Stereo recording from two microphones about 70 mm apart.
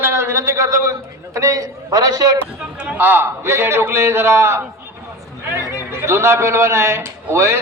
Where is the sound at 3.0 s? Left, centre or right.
Right.